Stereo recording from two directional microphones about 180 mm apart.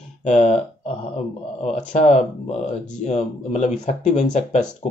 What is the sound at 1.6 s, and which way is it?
Speech, 40° left (ahead or behind).